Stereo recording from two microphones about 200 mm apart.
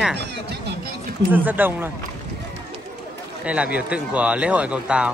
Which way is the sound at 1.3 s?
10° right (ahead or behind).